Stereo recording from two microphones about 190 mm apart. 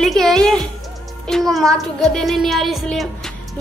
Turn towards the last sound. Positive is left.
turn(degrees=0)  # may be behind; listen again after turning